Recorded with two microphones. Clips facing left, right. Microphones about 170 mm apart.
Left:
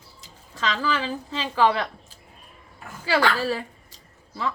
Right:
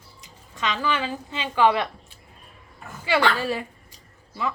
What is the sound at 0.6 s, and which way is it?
A woman's voice, 35° left (ahead or behind).